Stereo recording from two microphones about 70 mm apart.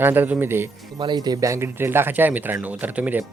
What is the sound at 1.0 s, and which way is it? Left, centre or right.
Speech, right.